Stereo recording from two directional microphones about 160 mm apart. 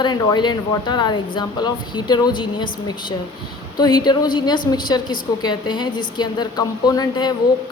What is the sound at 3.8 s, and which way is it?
A woman's voice, 25° left (ahead or behind).